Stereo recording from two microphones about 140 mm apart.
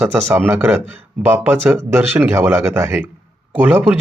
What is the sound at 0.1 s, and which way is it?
Speech, 15° right (ahead or behind).